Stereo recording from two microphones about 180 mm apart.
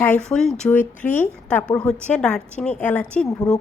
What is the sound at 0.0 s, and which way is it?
A woman's voice, 5° left (ahead or behind).